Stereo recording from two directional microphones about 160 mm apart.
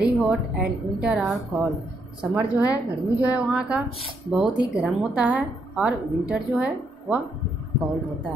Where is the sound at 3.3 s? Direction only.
5° right (ahead or behind).